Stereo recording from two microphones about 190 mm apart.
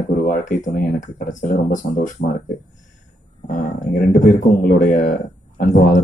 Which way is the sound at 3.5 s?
45° left (ahead or behind).